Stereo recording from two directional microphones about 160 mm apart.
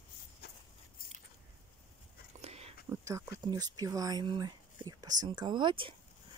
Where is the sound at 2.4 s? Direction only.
40° right (ahead or behind).